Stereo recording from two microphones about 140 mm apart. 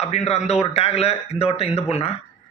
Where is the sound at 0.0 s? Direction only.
50° left (ahead or behind).